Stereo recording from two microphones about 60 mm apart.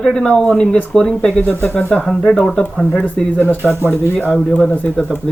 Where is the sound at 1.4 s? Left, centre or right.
Left.